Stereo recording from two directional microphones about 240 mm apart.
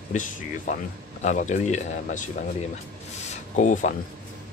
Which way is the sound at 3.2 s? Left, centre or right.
Left.